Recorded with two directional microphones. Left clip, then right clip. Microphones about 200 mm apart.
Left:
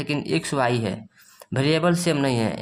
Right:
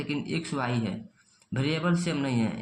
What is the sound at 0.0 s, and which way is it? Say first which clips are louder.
Speech: left 7 dB; 50° left (ahead or behind).